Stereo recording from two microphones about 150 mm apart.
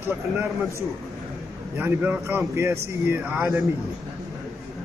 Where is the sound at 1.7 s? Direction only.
15° right (ahead or behind).